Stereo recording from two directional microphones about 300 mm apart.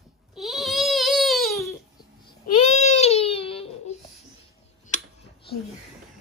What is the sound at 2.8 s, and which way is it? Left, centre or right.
Baby cry, left.